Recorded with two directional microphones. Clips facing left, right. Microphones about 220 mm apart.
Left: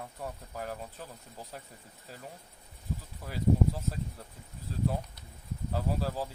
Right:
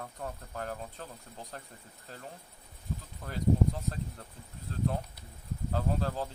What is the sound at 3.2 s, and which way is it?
Speech, 5° left (ahead or behind).